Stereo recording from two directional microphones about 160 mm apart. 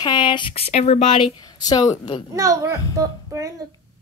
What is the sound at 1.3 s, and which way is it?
Speech, 25° left (ahead or behind).